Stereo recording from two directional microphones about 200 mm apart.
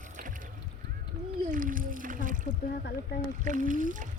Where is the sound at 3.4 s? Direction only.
40° right (ahead or behind).